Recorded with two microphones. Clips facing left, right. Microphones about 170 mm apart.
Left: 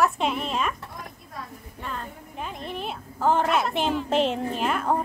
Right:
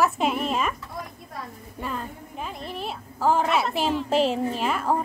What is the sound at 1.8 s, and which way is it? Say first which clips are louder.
A woman's voice: right 3 dB; 5° right (ahead or behind).